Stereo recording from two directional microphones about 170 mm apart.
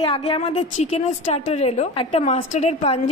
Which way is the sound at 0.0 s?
30° left (ahead or behind).